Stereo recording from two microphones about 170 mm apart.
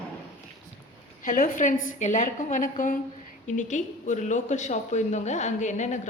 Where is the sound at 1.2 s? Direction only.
50° left (ahead or behind).